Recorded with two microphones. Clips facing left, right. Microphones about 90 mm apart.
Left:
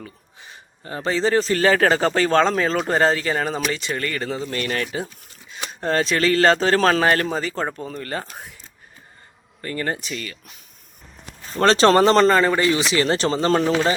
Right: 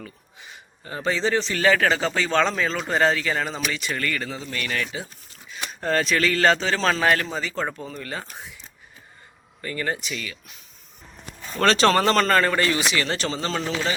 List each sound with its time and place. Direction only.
0.0 s a man's voice: 35° left (ahead or behind)
9.6 s a man's voice: 40° left (ahead or behind)
11.5 s a man's voice: 30° left (ahead or behind)
12.3 s a man's voice: 15° left (ahead or behind)
12.9 s a man's voice: 35° left (ahead or behind)
13.6 s a man's voice: 55° left (ahead or behind)